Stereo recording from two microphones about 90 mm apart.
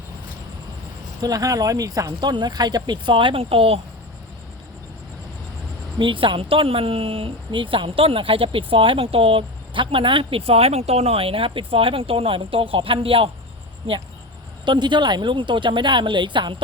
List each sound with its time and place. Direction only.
1.3 s speech: 40° right (ahead or behind)
2.3 s speech: 50° right (ahead or behind); by 3.8 s 90° right
6.0 s speech: 65° right (ahead or behind); by 14.0 s 90° right
14.6 s speech: 55° right (ahead or behind)